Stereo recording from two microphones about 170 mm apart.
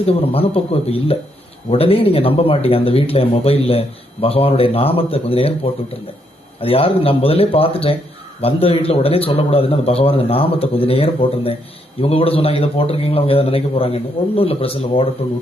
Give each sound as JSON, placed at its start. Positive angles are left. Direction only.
{"t": 0.0, "sound": "speech", "side_deg": 35}